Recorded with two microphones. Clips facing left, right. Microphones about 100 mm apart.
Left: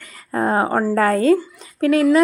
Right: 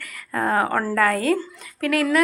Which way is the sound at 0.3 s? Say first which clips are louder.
Left 3 dB; 25° left (ahead or behind).